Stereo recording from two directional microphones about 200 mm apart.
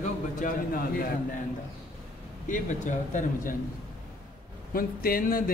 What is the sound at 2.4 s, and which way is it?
Speech, 40° left (ahead or behind).